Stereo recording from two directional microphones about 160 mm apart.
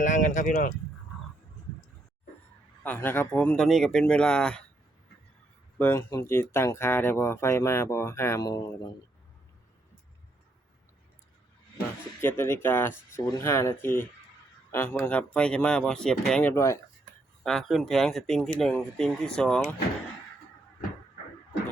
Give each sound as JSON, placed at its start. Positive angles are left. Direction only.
{"t": 0.0, "sound": "speech", "side_deg": 50}
{"t": 2.8, "sound": "speech", "side_deg": 10}
{"t": 5.8, "sound": "speech", "side_deg": 15}
{"t": 12.2, "sound": "speech", "side_deg": 15}
{"t": 17.4, "sound": "speech", "side_deg": 0}